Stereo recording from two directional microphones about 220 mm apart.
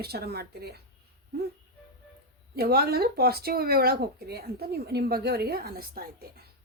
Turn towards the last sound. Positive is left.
turn(degrees=-45)  # may be behind; listen again after turning